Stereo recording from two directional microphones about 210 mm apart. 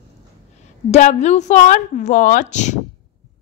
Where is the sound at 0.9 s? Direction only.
35° left (ahead or behind).